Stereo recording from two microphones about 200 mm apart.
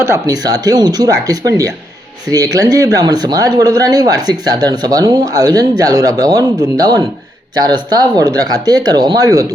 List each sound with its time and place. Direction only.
0.1 s speech: 20° right (ahead or behind)